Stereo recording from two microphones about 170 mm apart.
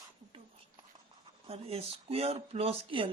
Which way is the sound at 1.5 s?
35° right (ahead or behind).